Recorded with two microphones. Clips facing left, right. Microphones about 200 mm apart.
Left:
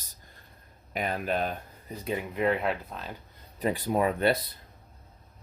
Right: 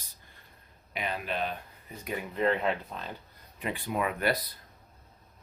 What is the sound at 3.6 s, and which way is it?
Speech, 40° left (ahead or behind).